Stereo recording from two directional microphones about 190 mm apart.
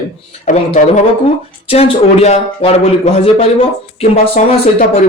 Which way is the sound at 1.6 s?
30° left (ahead or behind).